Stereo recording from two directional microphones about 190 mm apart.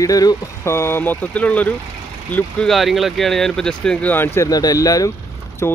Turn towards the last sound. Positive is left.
turn(degrees=15)  # may be behind; listen again after turning